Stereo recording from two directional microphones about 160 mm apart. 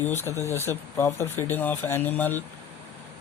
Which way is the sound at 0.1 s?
15° left (ahead or behind).